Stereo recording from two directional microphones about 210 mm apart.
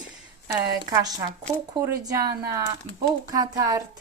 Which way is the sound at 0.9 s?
20° right (ahead or behind).